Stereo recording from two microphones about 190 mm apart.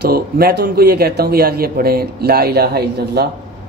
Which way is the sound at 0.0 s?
55° right (ahead or behind).